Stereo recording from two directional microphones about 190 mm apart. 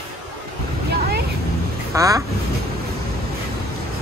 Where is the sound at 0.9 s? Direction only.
55° right (ahead or behind).